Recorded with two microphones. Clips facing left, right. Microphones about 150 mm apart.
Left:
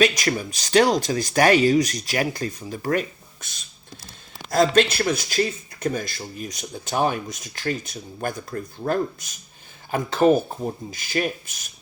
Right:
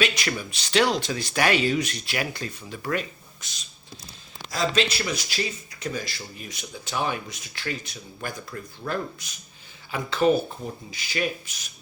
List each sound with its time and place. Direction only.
0.0 s speech: 40° left (ahead or behind)
4.5 s speech: 50° left (ahead or behind)